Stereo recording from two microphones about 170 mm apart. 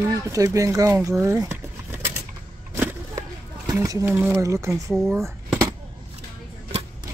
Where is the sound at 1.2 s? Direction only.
20° right (ahead or behind).